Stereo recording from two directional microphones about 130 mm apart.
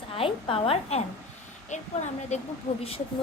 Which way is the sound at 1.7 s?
65° left (ahead or behind).